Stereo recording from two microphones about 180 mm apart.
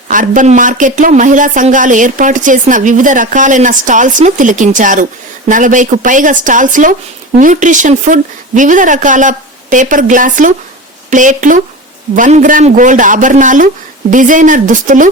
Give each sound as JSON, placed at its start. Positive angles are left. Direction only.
{"t": 0.1, "sound": "speech", "side_deg": -45}